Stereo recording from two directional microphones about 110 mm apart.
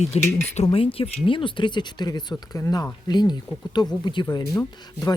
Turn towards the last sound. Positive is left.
turn(degrees=35)  # may be behind; listen again after turning